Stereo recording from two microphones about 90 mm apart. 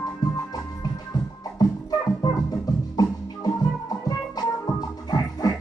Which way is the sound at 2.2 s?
45° left (ahead or behind).